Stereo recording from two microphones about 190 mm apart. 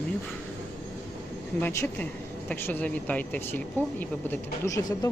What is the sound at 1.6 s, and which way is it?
Speech, 10° left (ahead or behind).